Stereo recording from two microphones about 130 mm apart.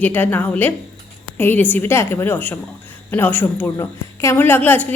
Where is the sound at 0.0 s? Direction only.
15° left (ahead or behind).